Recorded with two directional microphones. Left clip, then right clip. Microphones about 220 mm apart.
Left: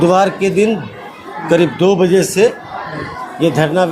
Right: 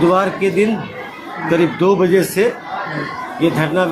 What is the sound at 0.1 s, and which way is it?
Speech, 45° left (ahead or behind).